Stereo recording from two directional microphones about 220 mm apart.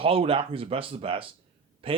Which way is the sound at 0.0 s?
25° right (ahead or behind).